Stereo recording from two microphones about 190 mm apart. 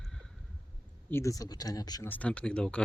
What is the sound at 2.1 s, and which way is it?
Speech, 5° left (ahead or behind).